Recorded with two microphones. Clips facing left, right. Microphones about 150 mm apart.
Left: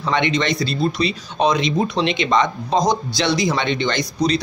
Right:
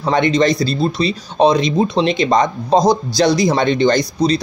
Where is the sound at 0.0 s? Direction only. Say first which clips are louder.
Right 6 dB; 40° right (ahead or behind).